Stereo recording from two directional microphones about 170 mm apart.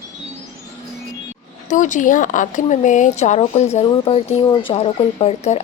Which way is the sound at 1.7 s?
45° left (ahead or behind).